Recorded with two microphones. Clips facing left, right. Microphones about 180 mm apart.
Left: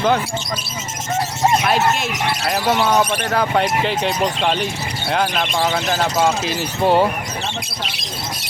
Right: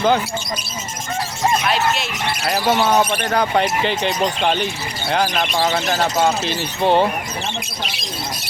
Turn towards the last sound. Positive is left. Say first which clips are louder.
# left 1 dB
turn(degrees=5)  # may be behind; listen again after turning